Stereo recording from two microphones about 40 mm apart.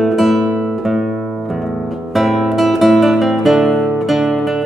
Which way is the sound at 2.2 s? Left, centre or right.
Centre.